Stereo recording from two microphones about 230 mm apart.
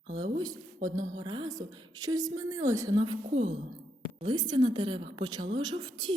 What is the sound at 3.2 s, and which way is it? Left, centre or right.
Speech, right.